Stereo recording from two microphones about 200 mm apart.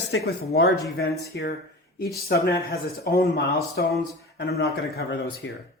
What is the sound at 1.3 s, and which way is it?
Speech, 55° left (ahead or behind).